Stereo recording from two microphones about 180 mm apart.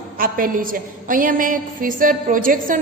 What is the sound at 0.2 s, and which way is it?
A woman's voice, 50° right (ahead or behind).